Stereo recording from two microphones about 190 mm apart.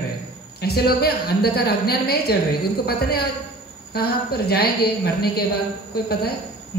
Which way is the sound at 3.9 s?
55° left (ahead or behind).